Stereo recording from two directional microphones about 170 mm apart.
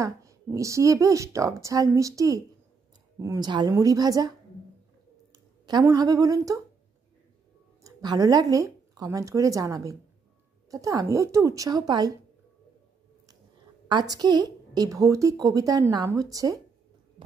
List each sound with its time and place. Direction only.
0.0 s a woman's voice: 20° right (ahead or behind)
5.7 s a woman's voice: 20° right (ahead or behind)
7.8 s a woman's voice: 20° right (ahead or behind)
13.8 s a woman's voice: 25° right (ahead or behind)